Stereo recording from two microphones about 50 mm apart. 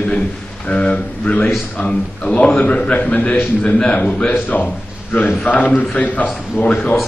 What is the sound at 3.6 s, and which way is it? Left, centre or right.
A man's voice, centre.